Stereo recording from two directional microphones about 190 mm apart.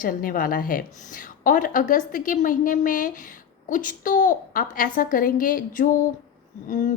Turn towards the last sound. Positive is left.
turn(degrees=45)  # may be behind; listen again after turning